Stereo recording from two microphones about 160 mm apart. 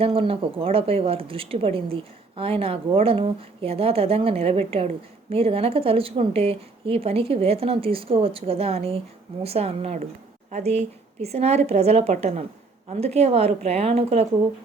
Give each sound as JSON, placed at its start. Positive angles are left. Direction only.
{"t": 0.0, "sound": "speech", "side_deg": -35}